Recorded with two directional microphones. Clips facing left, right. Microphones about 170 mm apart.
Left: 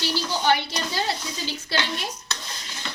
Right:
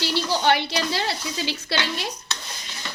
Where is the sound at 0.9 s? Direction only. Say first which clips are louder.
Right 1 dB; 75° right (ahead or behind).